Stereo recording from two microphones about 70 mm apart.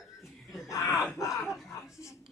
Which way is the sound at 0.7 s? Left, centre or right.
Left.